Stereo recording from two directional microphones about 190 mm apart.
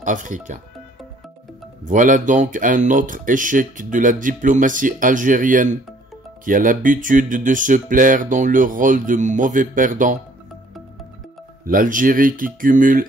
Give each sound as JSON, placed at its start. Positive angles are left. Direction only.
{"t": 0.0, "sound": "speech", "side_deg": -40}
{"t": 1.9, "sound": "speech", "side_deg": -45}
{"t": 11.6, "sound": "speech", "side_deg": -45}